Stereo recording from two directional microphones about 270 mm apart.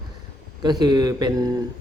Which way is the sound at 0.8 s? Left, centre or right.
Centre.